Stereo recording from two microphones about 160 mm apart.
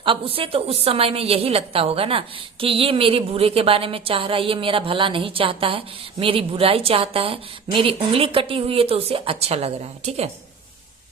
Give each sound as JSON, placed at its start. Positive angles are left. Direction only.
{"t": 0.0, "sound": "a woman's voice", "side_deg": -35}